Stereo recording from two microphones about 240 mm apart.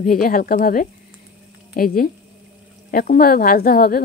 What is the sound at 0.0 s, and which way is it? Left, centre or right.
A woman's voice, left.